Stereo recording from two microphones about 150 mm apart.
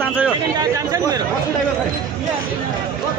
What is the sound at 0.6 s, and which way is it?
Speech, 25° right (ahead or behind).